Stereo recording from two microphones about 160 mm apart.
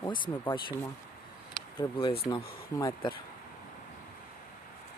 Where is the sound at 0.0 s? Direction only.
30° left (ahead or behind).